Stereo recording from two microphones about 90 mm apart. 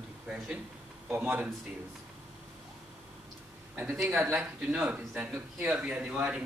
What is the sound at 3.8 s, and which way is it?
A man's voice, 15° right (ahead or behind).